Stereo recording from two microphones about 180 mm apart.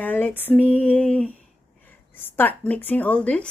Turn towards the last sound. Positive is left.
turn(degrees=5)  # may be behind; listen again after turning